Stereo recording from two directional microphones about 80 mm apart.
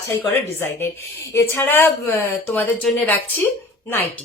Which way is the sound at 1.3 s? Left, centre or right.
Left.